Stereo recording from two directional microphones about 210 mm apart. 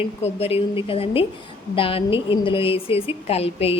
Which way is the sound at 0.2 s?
30° left (ahead or behind).